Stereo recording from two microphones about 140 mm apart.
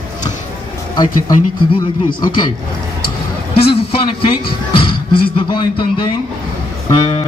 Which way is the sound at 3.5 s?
40° left (ahead or behind).